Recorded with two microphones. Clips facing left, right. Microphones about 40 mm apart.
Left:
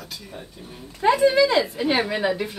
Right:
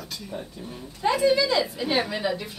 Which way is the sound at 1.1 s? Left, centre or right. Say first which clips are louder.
Left 4 dB; left.